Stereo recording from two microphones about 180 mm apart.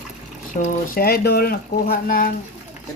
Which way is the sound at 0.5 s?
50° left (ahead or behind).